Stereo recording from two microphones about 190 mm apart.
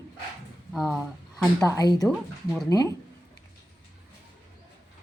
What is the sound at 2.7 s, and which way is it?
Speech, 15° left (ahead or behind).